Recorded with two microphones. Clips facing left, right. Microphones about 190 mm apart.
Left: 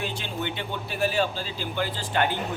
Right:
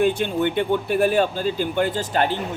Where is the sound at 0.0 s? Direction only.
55° right (ahead or behind); by 2.4 s 35° right (ahead or behind).